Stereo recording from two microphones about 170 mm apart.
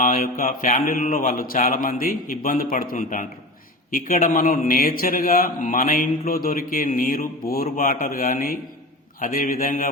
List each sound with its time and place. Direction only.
0.0 s a man's voice: 55° left (ahead or behind)